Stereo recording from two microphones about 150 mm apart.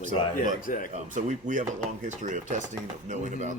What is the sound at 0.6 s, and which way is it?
Speech, 65° left (ahead or behind).